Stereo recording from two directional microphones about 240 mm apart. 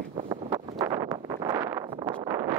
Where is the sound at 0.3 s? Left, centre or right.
Centre.